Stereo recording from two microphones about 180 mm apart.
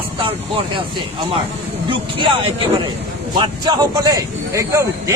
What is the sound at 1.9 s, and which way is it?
Speech, 30° right (ahead or behind).